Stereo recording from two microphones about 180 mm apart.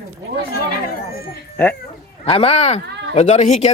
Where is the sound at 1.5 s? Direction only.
10° left (ahead or behind).